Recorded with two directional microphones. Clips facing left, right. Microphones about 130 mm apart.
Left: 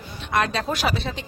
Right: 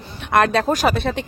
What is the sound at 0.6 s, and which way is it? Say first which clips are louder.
Speech: right 6 dB; 45° right (ahead or behind).